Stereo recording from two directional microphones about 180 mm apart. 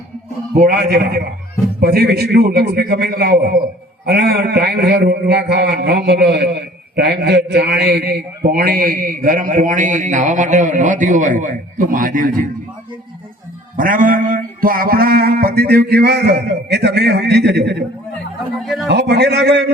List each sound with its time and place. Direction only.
0.7 s a man's voice: 60° right (ahead or behind)
13.7 s a man's voice: 50° right (ahead or behind); by 17.8 s 65° right (ahead or behind)
18.9 s a man's voice: 70° right (ahead or behind)